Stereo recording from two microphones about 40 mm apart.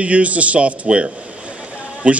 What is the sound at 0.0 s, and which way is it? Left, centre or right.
A man's voice, right.